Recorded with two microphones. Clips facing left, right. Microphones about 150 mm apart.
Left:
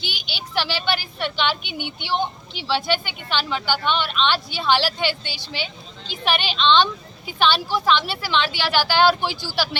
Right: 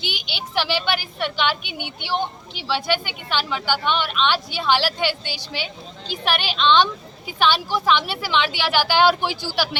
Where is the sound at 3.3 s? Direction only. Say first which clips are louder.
Even; 10° right (ahead or behind).